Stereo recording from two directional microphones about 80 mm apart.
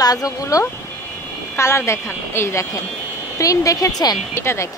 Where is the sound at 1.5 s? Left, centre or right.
Left.